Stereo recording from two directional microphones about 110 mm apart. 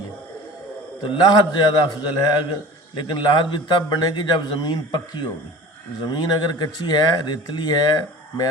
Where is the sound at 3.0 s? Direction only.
45° left (ahead or behind).